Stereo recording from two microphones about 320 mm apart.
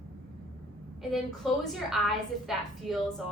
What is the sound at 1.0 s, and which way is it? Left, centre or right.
A woman's voice, centre.